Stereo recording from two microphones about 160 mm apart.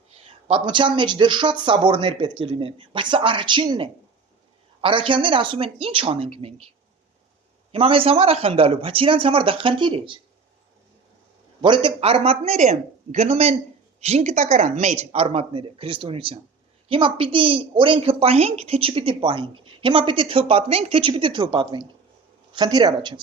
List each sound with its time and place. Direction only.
0.1 s a woman's voice: 35° right (ahead or behind)
7.7 s a woman's voice: 35° right (ahead or behind)
11.6 s a woman's voice: 30° right (ahead or behind)